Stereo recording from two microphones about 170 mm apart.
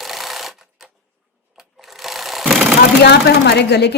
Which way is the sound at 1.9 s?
Centre (ahead or behind).